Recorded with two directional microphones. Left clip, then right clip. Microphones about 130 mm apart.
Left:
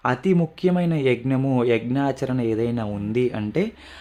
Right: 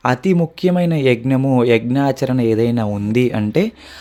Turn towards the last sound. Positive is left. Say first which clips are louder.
# right 6 dB
turn(degrees=-40)  # may be behind; listen again after turning